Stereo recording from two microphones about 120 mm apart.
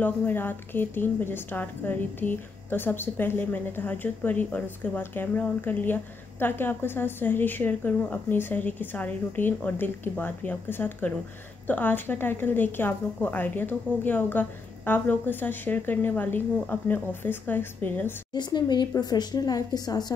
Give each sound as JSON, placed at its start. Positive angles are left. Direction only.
{"t": 0.0, "sound": "a woman's voice", "side_deg": 15}
{"t": 18.3, "sound": "a woman's voice", "side_deg": 35}